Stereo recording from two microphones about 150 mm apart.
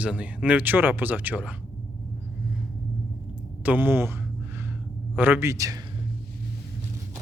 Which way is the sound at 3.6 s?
10° right (ahead or behind).